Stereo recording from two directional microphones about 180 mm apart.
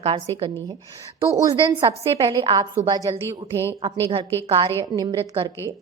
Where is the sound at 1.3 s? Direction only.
20° right (ahead or behind).